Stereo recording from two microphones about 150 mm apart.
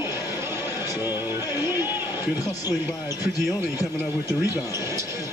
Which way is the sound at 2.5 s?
25° left (ahead or behind).